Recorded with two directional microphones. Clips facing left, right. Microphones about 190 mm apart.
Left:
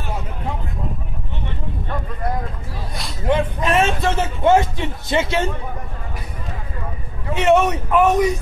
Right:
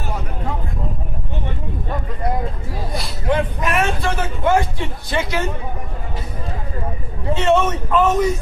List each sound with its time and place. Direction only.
3.3 s a man's voice: 25° left (ahead or behind)
7.3 s a man's voice: 15° left (ahead or behind)